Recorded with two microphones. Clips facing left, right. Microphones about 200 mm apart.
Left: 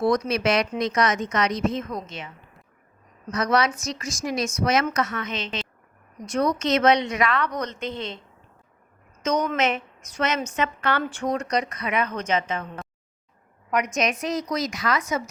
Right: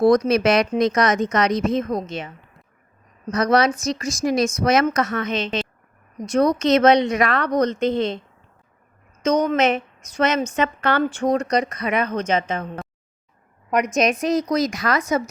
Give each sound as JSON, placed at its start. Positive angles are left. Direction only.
{"t": 0.0, "sound": "speech", "side_deg": -40}
{"t": 3.3, "sound": "speech", "side_deg": -35}
{"t": 6.3, "sound": "speech", "side_deg": -35}
{"t": 9.2, "sound": "speech", "side_deg": -30}